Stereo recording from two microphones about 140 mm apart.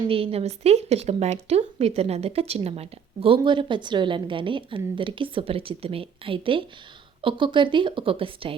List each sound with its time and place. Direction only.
0.1 s a woman's voice: 45° right (ahead or behind)